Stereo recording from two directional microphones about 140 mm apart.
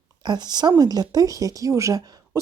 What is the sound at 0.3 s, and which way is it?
A woman's voice, 30° right (ahead or behind).